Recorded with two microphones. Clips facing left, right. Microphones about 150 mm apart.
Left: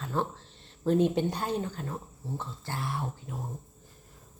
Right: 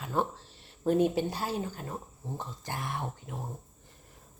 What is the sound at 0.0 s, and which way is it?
Speech, 10° right (ahead or behind).